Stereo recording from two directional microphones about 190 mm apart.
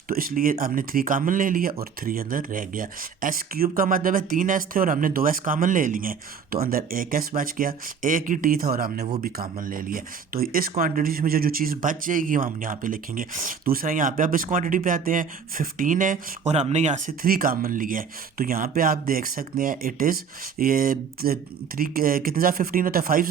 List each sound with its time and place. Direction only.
0.1 s speech: 50° right (ahead or behind)